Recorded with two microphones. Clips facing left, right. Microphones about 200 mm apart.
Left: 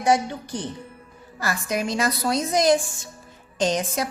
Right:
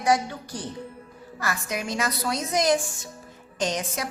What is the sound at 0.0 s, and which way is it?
A woman's voice, 25° left (ahead or behind).